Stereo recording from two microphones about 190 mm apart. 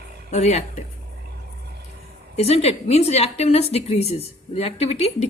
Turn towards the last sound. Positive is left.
turn(degrees=35)  # may be behind; listen again after turning